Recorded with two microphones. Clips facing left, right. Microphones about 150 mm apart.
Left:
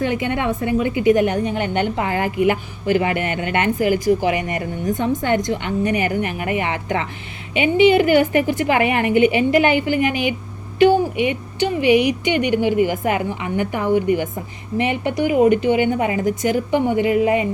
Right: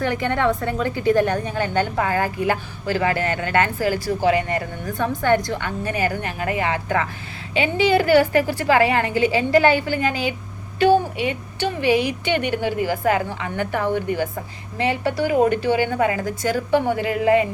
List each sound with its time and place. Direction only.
0.0 s a woman's voice: 15° left (ahead or behind)